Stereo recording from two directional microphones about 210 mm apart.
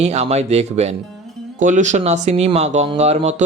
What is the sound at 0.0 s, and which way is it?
Speech, 30° right (ahead or behind).